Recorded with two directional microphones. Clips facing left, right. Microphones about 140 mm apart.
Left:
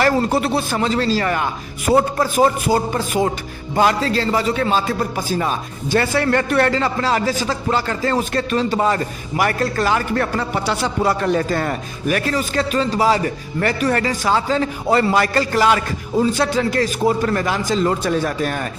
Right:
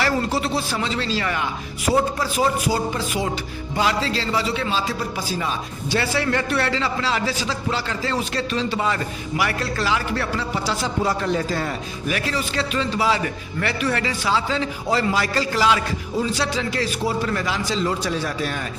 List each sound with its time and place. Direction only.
0.0 s a man's voice: 50° left (ahead or behind)